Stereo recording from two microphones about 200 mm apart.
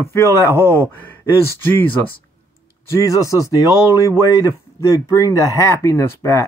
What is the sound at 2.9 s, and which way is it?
Speech, 15° left (ahead or behind).